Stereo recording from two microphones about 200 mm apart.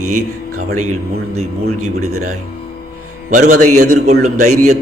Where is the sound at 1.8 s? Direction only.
90° right.